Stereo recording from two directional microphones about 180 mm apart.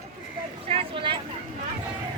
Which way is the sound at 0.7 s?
30° right (ahead or behind).